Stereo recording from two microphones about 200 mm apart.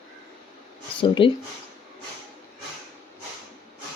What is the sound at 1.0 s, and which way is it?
Speech, 25° left (ahead or behind).